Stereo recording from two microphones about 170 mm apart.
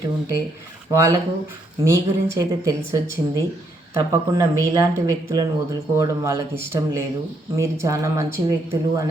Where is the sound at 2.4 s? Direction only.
20° right (ahead or behind).